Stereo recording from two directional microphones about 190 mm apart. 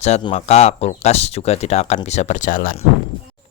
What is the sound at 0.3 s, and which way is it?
A man's voice, 35° left (ahead or behind).